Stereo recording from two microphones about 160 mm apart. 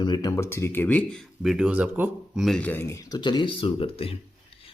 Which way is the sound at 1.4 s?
5° right (ahead or behind).